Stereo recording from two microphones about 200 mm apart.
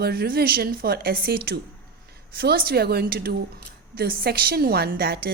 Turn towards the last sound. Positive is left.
turn(degrees=-50)  # may be behind; listen again after turning